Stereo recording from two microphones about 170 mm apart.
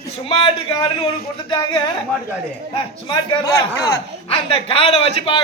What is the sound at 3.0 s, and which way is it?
Speech, 20° left (ahead or behind).